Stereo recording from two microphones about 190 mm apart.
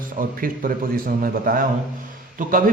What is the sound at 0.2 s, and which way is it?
A man's voice, 50° right (ahead or behind).